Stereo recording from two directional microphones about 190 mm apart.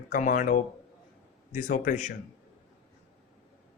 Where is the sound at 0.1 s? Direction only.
45° left (ahead or behind).